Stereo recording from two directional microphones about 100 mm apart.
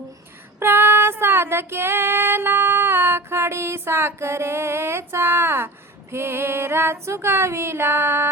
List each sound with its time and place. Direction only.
0.6 s female singing: 25° right (ahead or behind)